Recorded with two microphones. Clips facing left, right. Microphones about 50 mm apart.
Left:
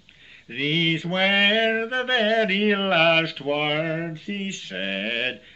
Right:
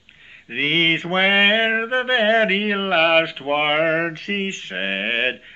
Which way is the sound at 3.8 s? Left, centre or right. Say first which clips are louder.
Right 7 dB; right.